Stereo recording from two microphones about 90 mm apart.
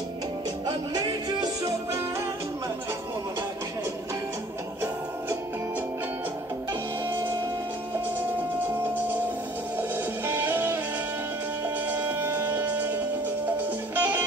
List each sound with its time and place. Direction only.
7.1 s music: 25° right (ahead or behind)
11.9 s music: 25° right (ahead or behind)